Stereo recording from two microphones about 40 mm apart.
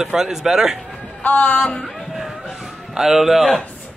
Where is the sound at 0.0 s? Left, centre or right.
Centre.